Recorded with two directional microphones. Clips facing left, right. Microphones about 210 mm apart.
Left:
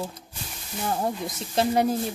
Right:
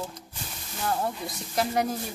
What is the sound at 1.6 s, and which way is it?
Speech, 25° left (ahead or behind).